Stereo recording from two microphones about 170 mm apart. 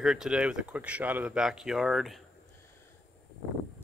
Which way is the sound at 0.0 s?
5° right (ahead or behind).